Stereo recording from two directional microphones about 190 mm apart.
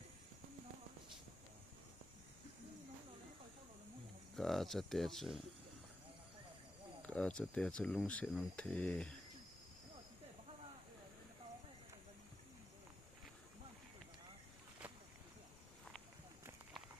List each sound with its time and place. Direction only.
4.4 s speech: centre (ahead or behind)
7.0 s speech: 5° left (ahead or behind)